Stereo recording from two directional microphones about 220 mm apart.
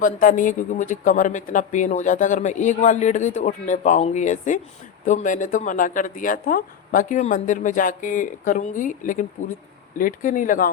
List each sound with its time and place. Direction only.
0.0 s speech: 35° left (ahead or behind)